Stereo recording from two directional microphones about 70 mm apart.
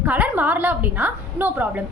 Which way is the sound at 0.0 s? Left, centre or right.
Right.